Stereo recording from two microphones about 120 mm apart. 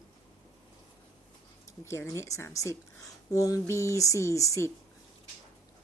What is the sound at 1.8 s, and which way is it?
Speech, 20° left (ahead or behind).